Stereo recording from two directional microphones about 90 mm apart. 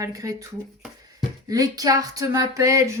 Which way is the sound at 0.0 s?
40° right (ahead or behind).